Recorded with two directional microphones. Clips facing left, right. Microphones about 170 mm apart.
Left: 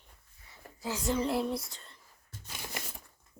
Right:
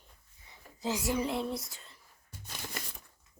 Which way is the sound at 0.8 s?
10° right (ahead or behind).